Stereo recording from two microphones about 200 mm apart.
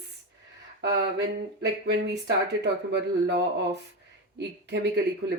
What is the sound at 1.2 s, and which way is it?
Speech, 60° right (ahead or behind).